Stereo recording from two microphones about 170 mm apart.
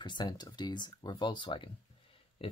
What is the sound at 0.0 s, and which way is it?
Speech, 25° left (ahead or behind).